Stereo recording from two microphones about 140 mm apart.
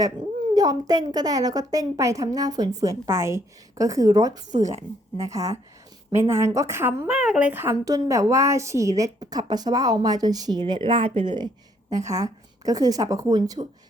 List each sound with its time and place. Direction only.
0.5 s a woman's voice: 25° right (ahead or behind)
4.5 s a woman's voice: 55° right (ahead or behind)
5.1 s a woman's voice: 25° right (ahead or behind)
7.1 s a woman's voice: 5° right (ahead or behind); by 11.4 s 35° right (ahead or behind)
11.9 s a woman's voice: 25° right (ahead or behind)